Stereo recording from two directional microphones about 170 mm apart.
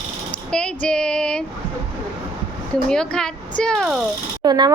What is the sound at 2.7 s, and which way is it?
Speech, 5° left (ahead or behind).